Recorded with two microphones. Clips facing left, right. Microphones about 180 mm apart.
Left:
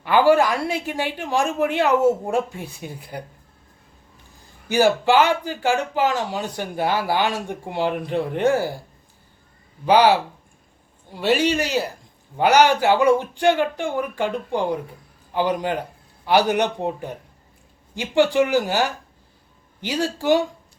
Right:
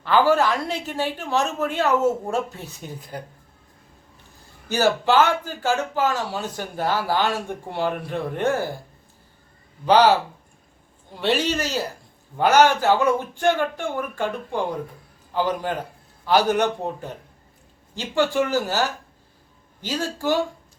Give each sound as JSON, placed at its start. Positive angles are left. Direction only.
{"t": 0.0, "sound": "speech", "side_deg": 15}
{"t": 4.7, "sound": "speech", "side_deg": 10}
{"t": 9.8, "sound": "speech", "side_deg": 10}
{"t": 11.2, "sound": "a man's voice", "side_deg": 10}
{"t": 19.8, "sound": "speech", "side_deg": 15}